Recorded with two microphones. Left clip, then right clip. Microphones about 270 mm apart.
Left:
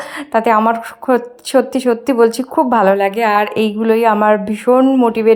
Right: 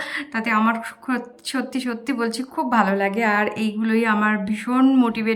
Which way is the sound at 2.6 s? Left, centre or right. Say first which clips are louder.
Left 8 dB; left.